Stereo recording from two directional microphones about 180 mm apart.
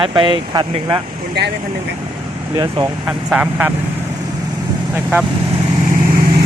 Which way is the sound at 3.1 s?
10° right (ahead or behind).